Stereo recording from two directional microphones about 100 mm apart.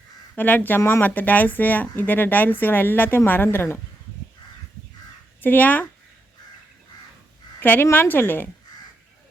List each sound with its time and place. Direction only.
0.3 s speech: 15° left (ahead or behind)
5.4 s speech: 15° left (ahead or behind)
7.6 s speech: 20° left (ahead or behind)